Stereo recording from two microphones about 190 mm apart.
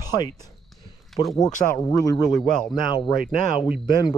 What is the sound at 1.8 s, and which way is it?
Speech, 20° left (ahead or behind).